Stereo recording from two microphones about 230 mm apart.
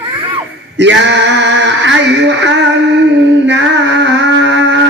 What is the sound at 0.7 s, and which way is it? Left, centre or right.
Male singing, right.